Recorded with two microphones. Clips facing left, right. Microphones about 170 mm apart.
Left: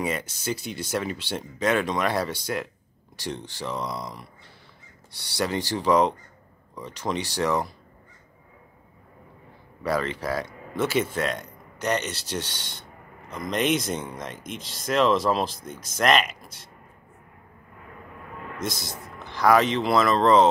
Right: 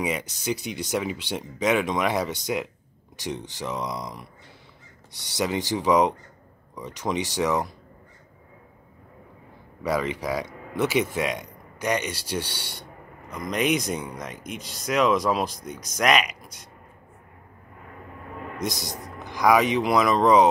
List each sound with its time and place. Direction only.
0.0 s speech: 15° right (ahead or behind)
9.8 s speech: 15° right (ahead or behind)
18.6 s speech: 15° right (ahead or behind)